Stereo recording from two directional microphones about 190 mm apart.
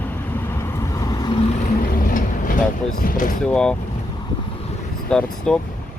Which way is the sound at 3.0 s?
45° left (ahead or behind).